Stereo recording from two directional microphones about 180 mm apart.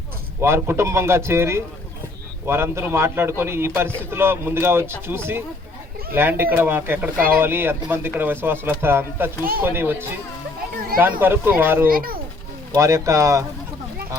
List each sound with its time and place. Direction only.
0.4 s speech: 15° right (ahead or behind)
11.2 s speech: 10° right (ahead or behind)
11.9 s speech: 55° right (ahead or behind)
12.7 s speech: 15° right (ahead or behind)